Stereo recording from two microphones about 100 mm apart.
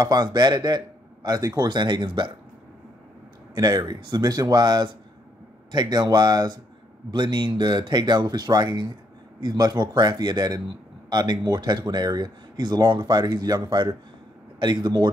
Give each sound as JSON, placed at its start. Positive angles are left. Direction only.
{"t": 0.0, "sound": "speech", "side_deg": -45}
{"t": 1.7, "sound": "speech", "side_deg": -50}
{"t": 3.5, "sound": "speech", "side_deg": -45}